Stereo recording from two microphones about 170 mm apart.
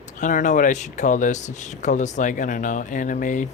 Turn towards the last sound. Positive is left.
turn(degrees=50)  # may be behind; listen again after turning